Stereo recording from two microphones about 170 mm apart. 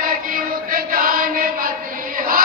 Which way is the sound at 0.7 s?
60° right (ahead or behind).